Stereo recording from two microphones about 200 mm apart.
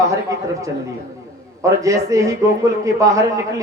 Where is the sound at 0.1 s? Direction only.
15° right (ahead or behind).